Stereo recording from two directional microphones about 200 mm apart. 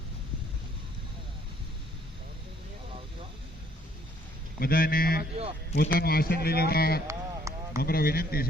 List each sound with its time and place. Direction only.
4.6 s speech: 45° left (ahead or behind)
7.1 s a sound: 15° right (ahead or behind)
7.8 s speech: 50° left (ahead or behind)